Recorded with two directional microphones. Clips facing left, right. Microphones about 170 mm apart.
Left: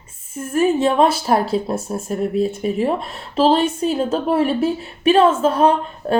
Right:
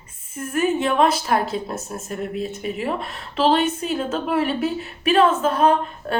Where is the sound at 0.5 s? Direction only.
30° left (ahead or behind).